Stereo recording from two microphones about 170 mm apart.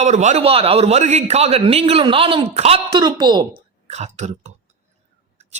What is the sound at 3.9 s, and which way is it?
Speech, 40° right (ahead or behind).